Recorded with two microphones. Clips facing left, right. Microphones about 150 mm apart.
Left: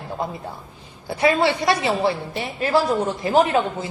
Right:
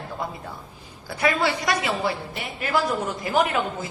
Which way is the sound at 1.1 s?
25° left (ahead or behind).